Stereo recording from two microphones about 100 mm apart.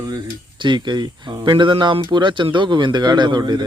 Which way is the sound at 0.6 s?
50° right (ahead or behind).